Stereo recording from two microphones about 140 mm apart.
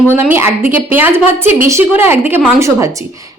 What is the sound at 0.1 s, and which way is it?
A woman's voice, 15° right (ahead or behind).